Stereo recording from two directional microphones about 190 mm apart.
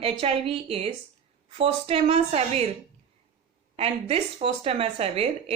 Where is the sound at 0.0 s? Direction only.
30° right (ahead or behind).